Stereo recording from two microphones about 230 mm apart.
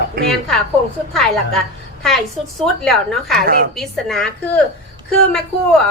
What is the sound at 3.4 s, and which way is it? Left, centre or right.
Speech, right.